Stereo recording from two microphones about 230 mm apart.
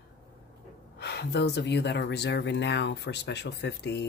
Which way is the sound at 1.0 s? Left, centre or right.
Left.